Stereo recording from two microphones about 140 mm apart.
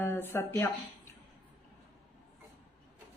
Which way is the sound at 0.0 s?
20° left (ahead or behind).